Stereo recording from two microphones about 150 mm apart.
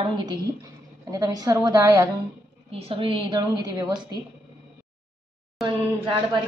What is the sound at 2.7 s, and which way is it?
A woman's voice, 40° right (ahead or behind).